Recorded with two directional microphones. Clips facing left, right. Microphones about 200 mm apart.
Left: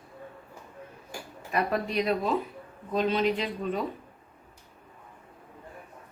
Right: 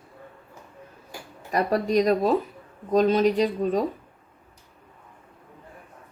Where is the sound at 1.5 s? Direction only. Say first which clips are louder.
Right 6 dB; 40° right (ahead or behind).